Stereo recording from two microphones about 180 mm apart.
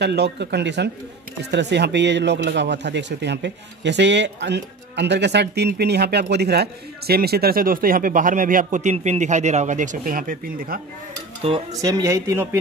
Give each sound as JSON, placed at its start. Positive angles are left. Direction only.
{"t": 0.0, "sound": "speech", "side_deg": -70}
{"t": 11.5, "sound": "speech", "side_deg": -30}
{"t": 11.8, "sound": "speech", "side_deg": -15}